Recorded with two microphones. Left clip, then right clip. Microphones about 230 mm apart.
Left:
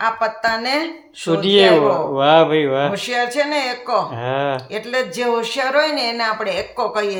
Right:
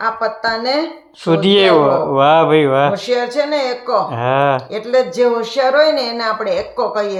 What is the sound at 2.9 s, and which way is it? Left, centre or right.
Speech, left.